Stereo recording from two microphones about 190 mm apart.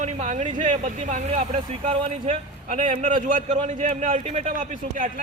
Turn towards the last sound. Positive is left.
turn(degrees=-40)  # may be behind; listen again after turning